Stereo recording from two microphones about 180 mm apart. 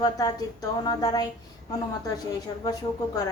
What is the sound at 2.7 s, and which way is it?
Speech, 20° left (ahead or behind).